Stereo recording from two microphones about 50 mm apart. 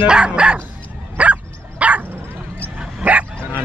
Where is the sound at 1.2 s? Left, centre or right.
Right.